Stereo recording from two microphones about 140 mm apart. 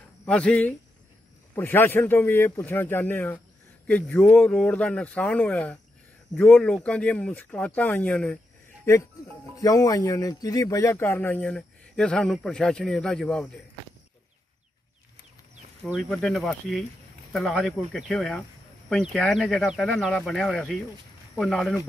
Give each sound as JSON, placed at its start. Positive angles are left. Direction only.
{"t": 0.3, "sound": "speech", "side_deg": 10}
{"t": 8.8, "sound": "speech", "side_deg": 20}
{"t": 15.8, "sound": "speech", "side_deg": 0}